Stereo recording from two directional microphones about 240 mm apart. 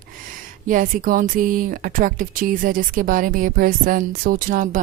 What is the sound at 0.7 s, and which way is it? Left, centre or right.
Speech, right.